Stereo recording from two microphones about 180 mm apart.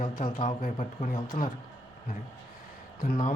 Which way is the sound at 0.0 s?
45° left (ahead or behind).